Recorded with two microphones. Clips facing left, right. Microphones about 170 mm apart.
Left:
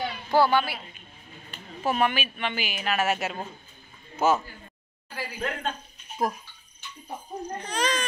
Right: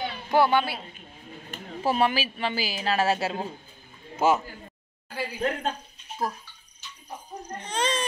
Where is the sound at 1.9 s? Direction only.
30° right (ahead or behind).